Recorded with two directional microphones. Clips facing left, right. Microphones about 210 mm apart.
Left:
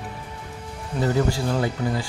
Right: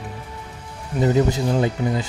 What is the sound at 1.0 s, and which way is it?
Speech, 20° right (ahead or behind).